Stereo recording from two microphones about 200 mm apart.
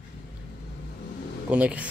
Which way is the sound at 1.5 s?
5° right (ahead or behind).